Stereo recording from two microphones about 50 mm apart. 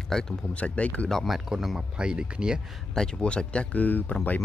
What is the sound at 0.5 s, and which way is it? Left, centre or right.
Speech, left.